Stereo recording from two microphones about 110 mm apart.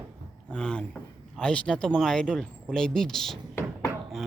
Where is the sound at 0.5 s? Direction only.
10° left (ahead or behind).